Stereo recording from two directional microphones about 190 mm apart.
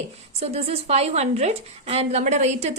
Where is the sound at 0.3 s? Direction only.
35° right (ahead or behind).